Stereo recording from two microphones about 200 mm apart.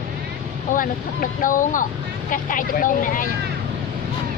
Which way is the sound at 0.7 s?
40° left (ahead or behind).